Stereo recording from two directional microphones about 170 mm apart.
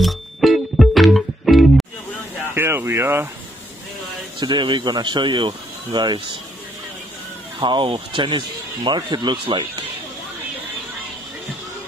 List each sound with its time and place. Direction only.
0.0 s music: centre (ahead or behind)
2.5 s speech: 15° right (ahead or behind)
4.4 s speech: 25° right (ahead or behind)
7.6 s speech: 30° right (ahead or behind)